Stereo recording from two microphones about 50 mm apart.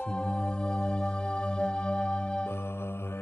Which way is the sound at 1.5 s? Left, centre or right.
Centre.